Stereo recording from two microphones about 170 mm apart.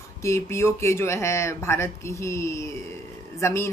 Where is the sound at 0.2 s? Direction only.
15° left (ahead or behind).